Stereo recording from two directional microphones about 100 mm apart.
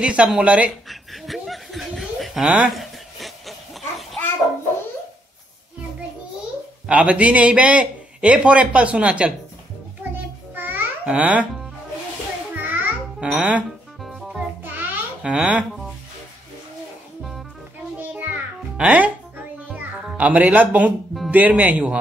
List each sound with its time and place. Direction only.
0.0 s a man's voice: 10° right (ahead or behind)
0.8 s chuckle: centre (ahead or behind)
6.9 s a man's voice: 15° right (ahead or behind)
10.5 s babbling: 20° right (ahead or behind)
12.5 s babbling: 15° right (ahead or behind)
14.0 s music: 5° right (ahead or behind)
14.6 s babbling: 20° right (ahead or behind)
17.2 s music: centre (ahead or behind)
17.9 s music: 20° right (ahead or behind)
21.3 s a man's voice: 15° right (ahead or behind)